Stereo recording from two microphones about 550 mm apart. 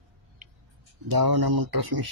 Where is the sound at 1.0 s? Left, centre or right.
Right.